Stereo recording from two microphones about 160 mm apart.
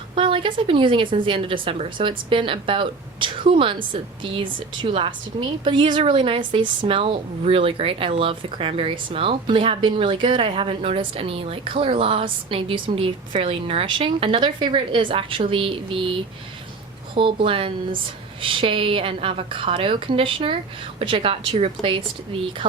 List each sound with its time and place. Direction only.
0.2 s speech: 35° right (ahead or behind)
17.2 s speech: 35° right (ahead or behind)